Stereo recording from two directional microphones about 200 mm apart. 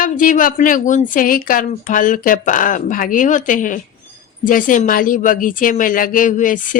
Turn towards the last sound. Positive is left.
turn(degrees=40)  # may be behind; listen again after turning